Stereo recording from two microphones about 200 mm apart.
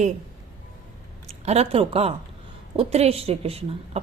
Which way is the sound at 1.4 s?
30° right (ahead or behind).